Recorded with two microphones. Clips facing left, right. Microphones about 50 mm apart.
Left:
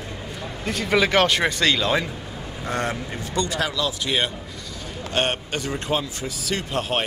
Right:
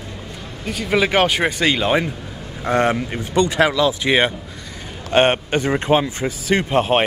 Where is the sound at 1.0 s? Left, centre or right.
Centre.